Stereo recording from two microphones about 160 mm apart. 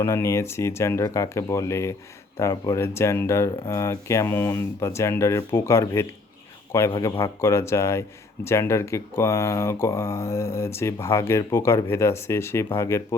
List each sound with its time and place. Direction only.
0.0 s speech: 15° left (ahead or behind)